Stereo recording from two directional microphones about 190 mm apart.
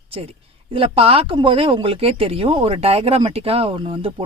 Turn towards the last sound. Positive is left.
turn(degrees=-30)  # may be behind; listen again after turning